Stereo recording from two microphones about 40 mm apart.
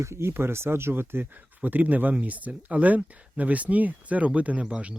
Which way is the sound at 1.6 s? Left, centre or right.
Right.